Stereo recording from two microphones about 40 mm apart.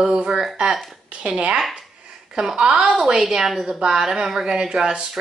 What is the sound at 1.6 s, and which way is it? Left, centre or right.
Speech, centre.